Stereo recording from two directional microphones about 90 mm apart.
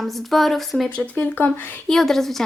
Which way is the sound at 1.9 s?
5° left (ahead or behind).